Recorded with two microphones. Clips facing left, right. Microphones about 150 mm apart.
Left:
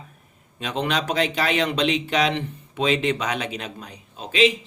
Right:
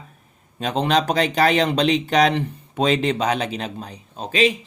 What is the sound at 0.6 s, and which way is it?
Speech, 35° right (ahead or behind).